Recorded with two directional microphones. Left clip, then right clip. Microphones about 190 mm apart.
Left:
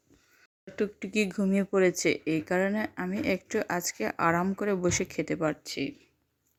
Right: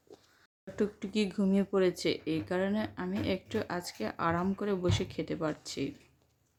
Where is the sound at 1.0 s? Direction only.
30° left (ahead or behind).